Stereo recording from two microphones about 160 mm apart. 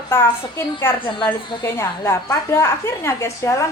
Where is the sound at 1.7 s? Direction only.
15° left (ahead or behind).